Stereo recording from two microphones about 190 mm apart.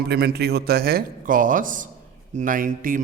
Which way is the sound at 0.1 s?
60° right (ahead or behind).